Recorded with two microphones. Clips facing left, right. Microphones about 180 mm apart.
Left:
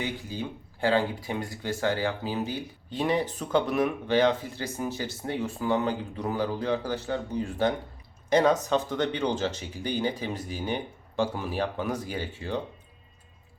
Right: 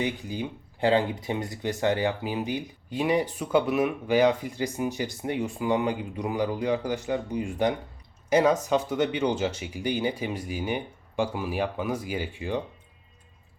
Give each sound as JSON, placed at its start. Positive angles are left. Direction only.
{"t": 0.0, "sound": "speech", "side_deg": -20}